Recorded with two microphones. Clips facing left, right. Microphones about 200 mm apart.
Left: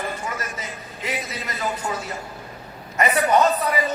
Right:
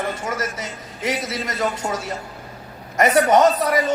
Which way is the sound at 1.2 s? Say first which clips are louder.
Right 5 dB; 85° right.